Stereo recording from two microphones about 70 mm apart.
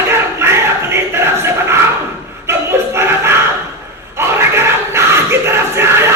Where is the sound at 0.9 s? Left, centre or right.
Right.